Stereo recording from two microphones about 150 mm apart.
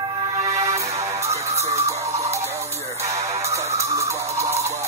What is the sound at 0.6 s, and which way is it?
Music, 20° right (ahead or behind).